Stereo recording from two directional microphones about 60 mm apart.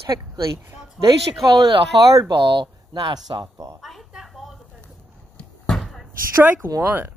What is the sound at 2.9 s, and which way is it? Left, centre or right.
Speech, right.